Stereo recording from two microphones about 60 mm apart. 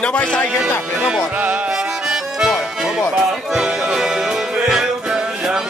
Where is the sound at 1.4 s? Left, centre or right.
Right.